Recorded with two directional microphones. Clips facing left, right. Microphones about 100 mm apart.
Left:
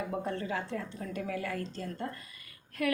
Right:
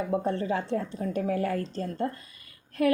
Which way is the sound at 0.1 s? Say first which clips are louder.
Right 7 dB; 30° right (ahead or behind).